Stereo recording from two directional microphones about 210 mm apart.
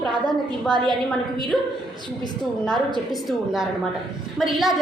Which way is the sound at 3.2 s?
Centre (ahead or behind).